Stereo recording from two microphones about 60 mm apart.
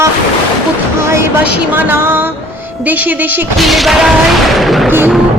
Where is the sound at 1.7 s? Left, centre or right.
Right.